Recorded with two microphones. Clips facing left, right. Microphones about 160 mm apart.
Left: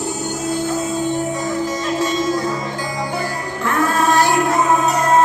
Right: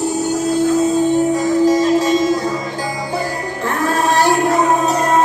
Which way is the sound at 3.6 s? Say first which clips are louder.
Even; 35° right (ahead or behind).